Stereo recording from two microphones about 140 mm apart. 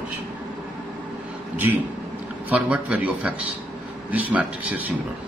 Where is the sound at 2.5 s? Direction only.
10° right (ahead or behind).